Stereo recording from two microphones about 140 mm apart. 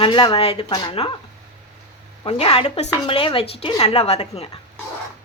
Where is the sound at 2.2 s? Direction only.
40° left (ahead or behind).